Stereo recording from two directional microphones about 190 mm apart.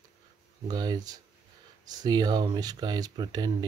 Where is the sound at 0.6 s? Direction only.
20° right (ahead or behind).